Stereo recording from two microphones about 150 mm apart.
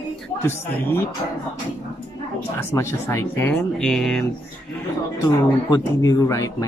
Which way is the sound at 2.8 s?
15° left (ahead or behind).